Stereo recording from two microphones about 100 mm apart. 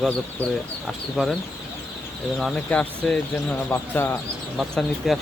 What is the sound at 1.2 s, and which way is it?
Speech, 5° right (ahead or behind).